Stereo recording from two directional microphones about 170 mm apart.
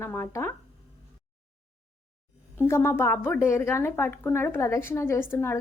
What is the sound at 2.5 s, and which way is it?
A woman's voice, 15° left (ahead or behind).